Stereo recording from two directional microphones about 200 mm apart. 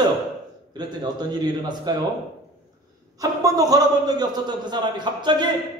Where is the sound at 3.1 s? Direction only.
20° right (ahead or behind).